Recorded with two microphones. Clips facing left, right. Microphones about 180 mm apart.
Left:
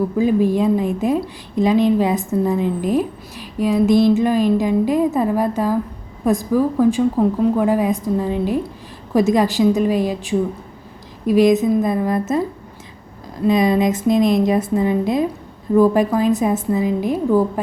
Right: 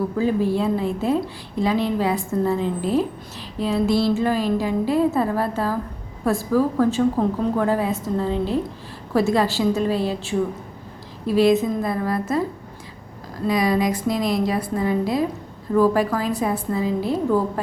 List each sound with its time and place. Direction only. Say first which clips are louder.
0.2 s a woman's voice: left 5 dB; 15° left (ahead or behind)
13.4 s speech: left 5 dB; 20° left (ahead or behind)